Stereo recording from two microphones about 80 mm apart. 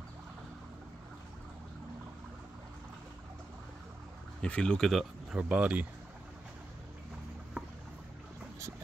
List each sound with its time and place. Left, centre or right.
4.4 s speech: centre
5.4 s speech: centre
7.6 s boat: centre